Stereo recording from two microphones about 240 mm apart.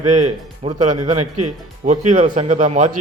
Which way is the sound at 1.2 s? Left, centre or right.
Right.